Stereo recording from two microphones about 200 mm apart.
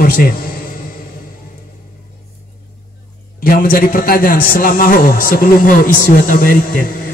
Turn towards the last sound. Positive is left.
turn(degrees=45)  # may be behind; listen again after turning